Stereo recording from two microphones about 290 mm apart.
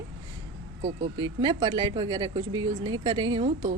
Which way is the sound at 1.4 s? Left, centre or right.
Centre.